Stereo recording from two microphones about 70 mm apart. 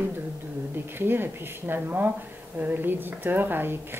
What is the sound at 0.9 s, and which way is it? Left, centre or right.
A woman's voice, right.